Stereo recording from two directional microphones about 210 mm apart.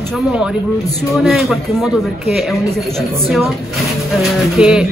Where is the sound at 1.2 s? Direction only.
Centre (ahead or behind).